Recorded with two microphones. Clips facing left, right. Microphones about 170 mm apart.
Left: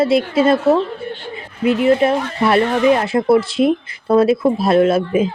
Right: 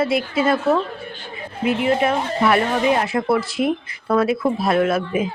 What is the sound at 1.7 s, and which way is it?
Speech, 20° right (ahead or behind).